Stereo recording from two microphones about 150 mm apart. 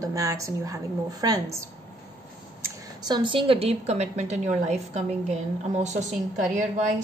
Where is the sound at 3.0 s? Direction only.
30° right (ahead or behind).